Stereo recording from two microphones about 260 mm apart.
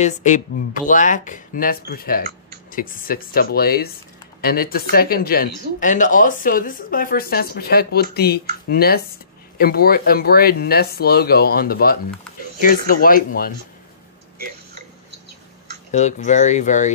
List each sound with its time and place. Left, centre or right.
0.0 s speech: left
15.9 s speech: left